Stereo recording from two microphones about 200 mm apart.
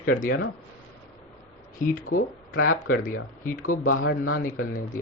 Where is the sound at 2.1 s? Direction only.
90° left.